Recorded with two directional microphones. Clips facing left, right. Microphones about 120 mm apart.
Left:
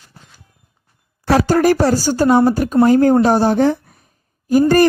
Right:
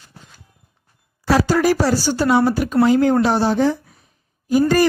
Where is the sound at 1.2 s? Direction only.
55° left (ahead or behind).